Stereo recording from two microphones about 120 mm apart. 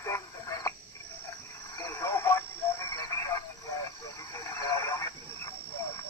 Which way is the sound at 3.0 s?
25° left (ahead or behind).